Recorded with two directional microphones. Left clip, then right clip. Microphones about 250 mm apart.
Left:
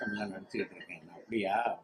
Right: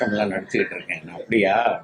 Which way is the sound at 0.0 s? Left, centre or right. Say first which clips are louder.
Right 16 dB; left.